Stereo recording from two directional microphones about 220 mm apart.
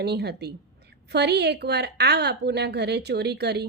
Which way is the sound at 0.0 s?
50° right (ahead or behind).